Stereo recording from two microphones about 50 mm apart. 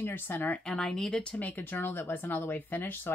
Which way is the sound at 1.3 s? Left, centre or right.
Left.